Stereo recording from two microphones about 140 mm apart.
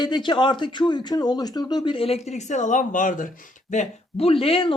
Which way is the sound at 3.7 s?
50° left (ahead or behind).